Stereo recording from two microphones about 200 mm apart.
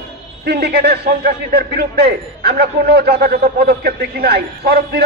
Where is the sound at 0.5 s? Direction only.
50° right (ahead or behind).